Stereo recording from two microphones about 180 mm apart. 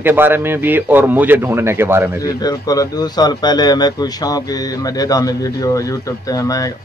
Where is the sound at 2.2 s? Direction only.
20° left (ahead or behind).